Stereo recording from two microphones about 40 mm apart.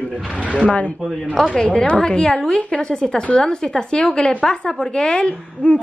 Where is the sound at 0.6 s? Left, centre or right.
Left.